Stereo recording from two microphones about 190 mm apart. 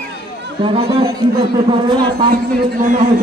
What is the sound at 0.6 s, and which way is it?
A man's voice, 30° right (ahead or behind).